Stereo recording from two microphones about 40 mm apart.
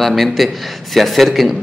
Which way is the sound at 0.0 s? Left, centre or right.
Centre.